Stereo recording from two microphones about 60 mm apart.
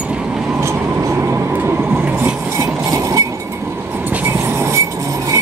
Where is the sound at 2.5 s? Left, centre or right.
Right.